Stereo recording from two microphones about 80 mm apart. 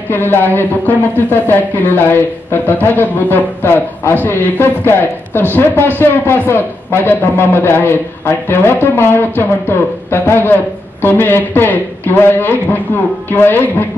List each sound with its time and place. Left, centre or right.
0.1 s speech: left